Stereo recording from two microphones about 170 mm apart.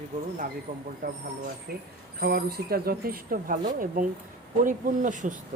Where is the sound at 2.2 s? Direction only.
65° right (ahead or behind); by 5.3 s 50° right (ahead or behind).